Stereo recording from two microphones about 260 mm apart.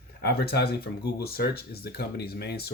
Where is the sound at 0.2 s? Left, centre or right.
Left.